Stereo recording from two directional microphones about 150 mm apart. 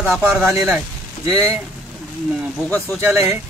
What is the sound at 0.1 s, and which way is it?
Speech, 15° right (ahead or behind).